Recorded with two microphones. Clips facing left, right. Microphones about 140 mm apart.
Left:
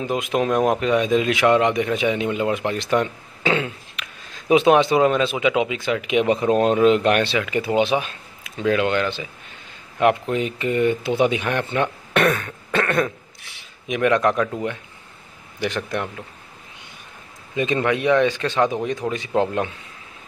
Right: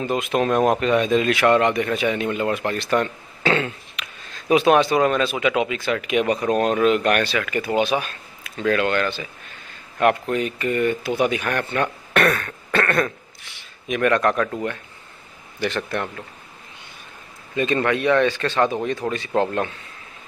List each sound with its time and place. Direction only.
0.0 s speech: 10° left (ahead or behind)
15.6 s speech: 15° left (ahead or behind)
17.6 s speech: 15° left (ahead or behind)